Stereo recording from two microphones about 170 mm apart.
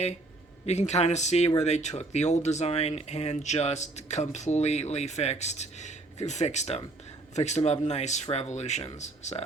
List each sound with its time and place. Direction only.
0.6 s speech: 40° left (ahead or behind)